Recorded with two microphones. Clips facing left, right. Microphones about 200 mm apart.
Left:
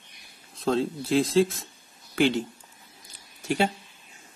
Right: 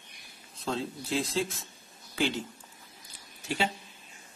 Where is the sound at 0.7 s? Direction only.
55° left (ahead or behind).